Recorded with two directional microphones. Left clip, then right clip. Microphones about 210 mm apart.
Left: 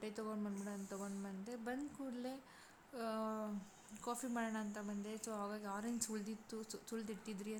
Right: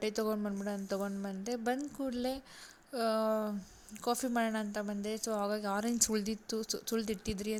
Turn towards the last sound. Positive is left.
turn(degrees=-30)  # may be behind; listen again after turning